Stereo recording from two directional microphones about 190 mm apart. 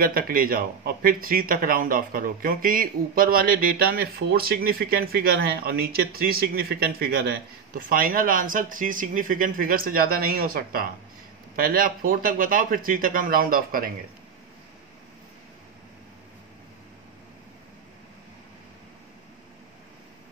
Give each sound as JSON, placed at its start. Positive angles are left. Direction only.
{"t": 0.0, "sound": "speech", "side_deg": -50}